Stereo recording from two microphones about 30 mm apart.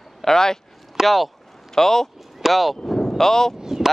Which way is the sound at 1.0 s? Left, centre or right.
Centre.